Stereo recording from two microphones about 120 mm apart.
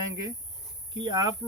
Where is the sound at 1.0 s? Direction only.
35° right (ahead or behind).